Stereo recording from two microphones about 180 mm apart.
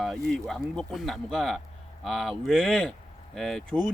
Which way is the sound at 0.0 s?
Centre (ahead or behind).